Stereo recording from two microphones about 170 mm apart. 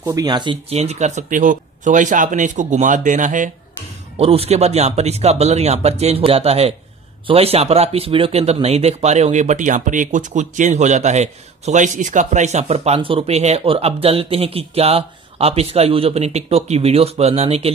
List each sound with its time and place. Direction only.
0.0 s speech: 20° right (ahead or behind); by 3.4 s 50° right (ahead or behind)
4.2 s speech: 40° right (ahead or behind)